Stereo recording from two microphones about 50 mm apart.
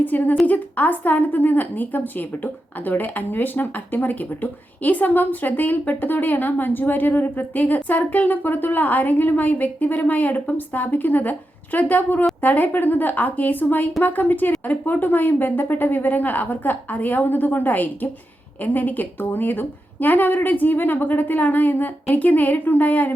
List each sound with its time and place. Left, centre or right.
0.0 s speech: left